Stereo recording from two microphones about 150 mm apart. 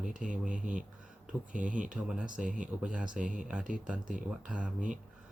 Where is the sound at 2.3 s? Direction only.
60° right (ahead or behind).